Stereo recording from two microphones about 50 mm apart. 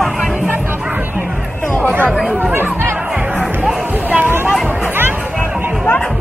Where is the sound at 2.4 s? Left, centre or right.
Right.